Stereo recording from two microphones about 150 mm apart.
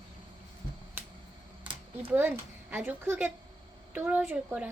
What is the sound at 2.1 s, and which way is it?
Speech, 15° right (ahead or behind).